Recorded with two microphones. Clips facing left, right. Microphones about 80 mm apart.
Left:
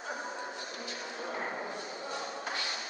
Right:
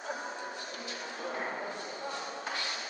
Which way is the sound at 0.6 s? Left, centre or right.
Left.